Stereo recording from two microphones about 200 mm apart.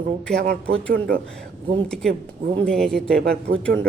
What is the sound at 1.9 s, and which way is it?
Speech, centre (ahead or behind).